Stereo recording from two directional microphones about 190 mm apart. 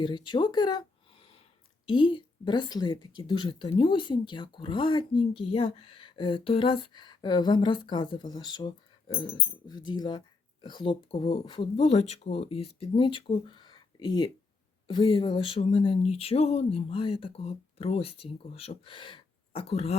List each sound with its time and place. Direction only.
0.0 s speech: 25° left (ahead or behind)